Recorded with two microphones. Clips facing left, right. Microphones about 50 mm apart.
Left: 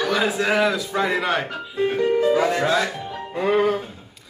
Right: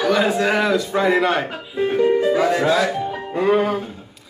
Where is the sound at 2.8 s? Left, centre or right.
Centre.